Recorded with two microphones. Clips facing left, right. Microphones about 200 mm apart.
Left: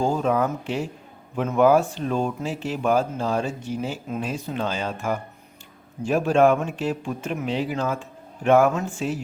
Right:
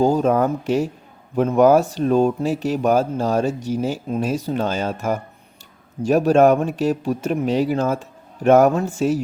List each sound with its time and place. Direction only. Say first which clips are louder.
0.0 s speech: right 5 dB; 40° right (ahead or behind)